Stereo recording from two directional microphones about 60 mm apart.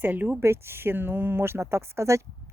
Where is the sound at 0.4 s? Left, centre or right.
Right.